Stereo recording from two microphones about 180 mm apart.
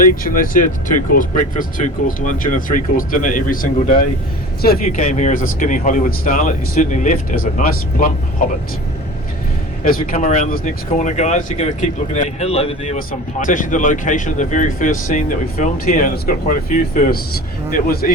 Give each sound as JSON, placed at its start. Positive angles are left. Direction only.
{"t": 0.0, "sound": "speech", "side_deg": 50}
{"t": 9.8, "sound": "speech", "side_deg": 55}
{"t": 13.0, "sound": "speech", "side_deg": 50}